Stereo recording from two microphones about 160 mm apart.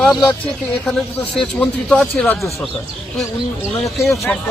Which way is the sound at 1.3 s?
5° left (ahead or behind).